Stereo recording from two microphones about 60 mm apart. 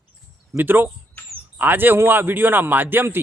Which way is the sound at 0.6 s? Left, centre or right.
Right.